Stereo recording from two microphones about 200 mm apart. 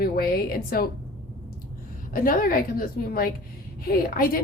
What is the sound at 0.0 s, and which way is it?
Speech, 50° left (ahead or behind).